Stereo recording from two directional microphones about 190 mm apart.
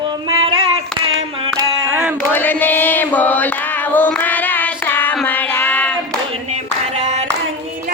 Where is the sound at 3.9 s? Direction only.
10° left (ahead or behind).